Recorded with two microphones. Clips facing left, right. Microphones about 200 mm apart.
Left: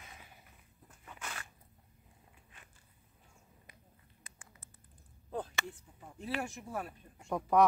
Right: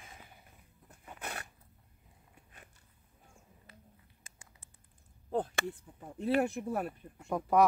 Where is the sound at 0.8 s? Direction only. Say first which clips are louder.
Right 3 dB; 60° right (ahead or behind).